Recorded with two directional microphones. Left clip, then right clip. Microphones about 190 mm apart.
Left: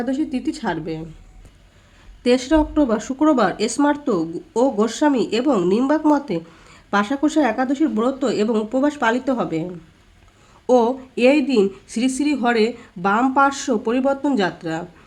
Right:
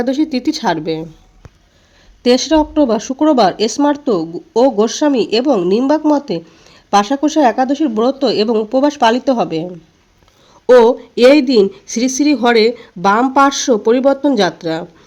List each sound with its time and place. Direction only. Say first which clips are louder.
0.0 s speech: right 7 dB; 40° right (ahead or behind)
2.2 s a woman's voice: right 5 dB; 25° right (ahead or behind)
10.7 s a woman's voice: right 9 dB; 25° right (ahead or behind)